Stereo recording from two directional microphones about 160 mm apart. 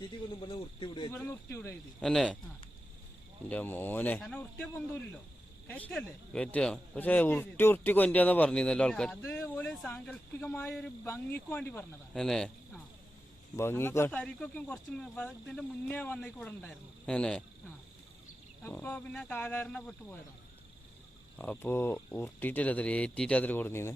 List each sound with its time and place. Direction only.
0.3 s cricket: 30° left (ahead or behind)
1.1 s speech: 15° left (ahead or behind)
2.0 s speech: 5° left (ahead or behind)
3.5 s speech: 10° left (ahead or behind)
13.6 s speech: 15° left (ahead or behind)
18.6 s speech: 10° left (ahead or behind)
21.3 s speech: 10° left (ahead or behind)